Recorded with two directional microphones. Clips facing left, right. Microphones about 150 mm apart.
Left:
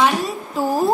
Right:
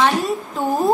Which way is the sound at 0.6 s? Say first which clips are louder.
Left 2 dB; 5° left (ahead or behind).